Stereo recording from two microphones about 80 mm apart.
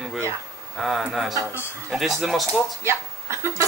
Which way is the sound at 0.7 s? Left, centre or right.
Centre.